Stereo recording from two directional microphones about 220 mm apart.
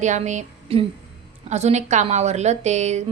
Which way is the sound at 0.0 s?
35° right (ahead or behind).